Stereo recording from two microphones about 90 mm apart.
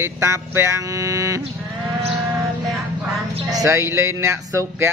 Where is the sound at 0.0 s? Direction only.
30° right (ahead or behind).